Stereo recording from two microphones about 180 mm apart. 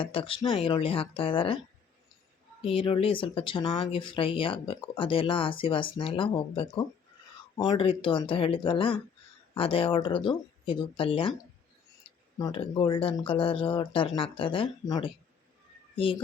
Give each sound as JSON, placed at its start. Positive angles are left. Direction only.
{"t": 0.0, "sound": "speech", "side_deg": 30}
{"t": 2.6, "sound": "speech", "side_deg": 30}
{"t": 12.4, "sound": "speech", "side_deg": 30}